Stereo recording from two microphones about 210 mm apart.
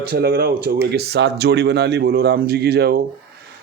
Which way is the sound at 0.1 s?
50° right (ahead or behind).